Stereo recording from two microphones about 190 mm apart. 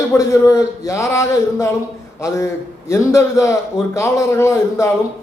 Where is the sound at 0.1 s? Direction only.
15° left (ahead or behind).